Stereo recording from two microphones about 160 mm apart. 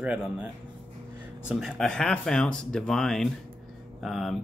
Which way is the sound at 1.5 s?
Centre (ahead or behind).